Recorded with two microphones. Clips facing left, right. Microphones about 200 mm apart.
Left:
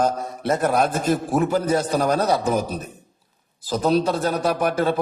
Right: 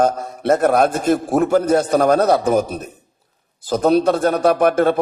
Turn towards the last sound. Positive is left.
turn(degrees=-55)  # may be behind; listen again after turning